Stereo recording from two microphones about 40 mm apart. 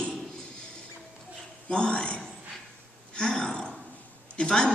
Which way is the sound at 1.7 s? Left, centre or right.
Left.